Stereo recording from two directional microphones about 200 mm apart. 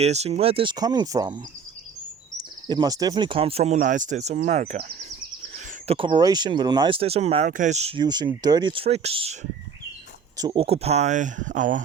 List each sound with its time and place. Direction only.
0.0 s speech: 35° right (ahead or behind)
2.6 s speech: 20° right (ahead or behind); by 4.8 s 35° right (ahead or behind)
5.9 s speech: 25° right (ahead or behind)
8.0 s speech: 20° right (ahead or behind); by 11.8 s 40° right (ahead or behind)